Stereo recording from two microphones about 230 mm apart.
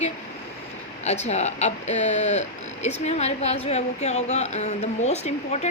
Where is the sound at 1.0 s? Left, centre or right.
Left.